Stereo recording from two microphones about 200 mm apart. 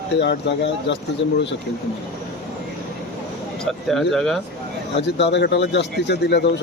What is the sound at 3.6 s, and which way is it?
Speech, centre (ahead or behind).